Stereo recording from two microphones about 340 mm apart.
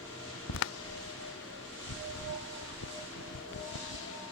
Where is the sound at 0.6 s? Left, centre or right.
Left.